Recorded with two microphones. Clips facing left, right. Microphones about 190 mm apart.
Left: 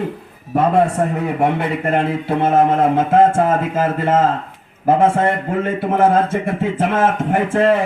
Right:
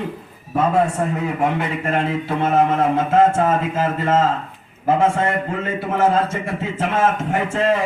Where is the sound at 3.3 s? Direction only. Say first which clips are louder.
Left 2 dB; 50° left (ahead or behind).